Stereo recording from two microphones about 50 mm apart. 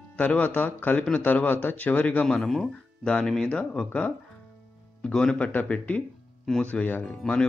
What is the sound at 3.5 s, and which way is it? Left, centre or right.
Speech, left.